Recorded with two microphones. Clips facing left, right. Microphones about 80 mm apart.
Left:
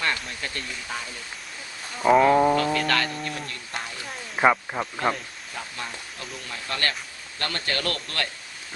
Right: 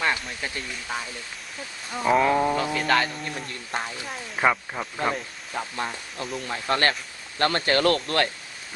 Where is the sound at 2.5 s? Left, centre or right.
Centre.